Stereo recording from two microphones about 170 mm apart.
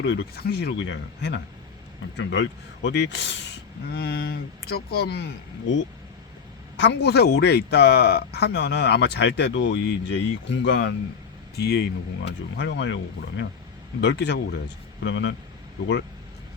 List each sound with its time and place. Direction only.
0.0 s a man's voice: 85° left
11.5 s a man's voice: 70° left (ahead or behind); by 13.0 s 90° left
14.0 s speech: 85° left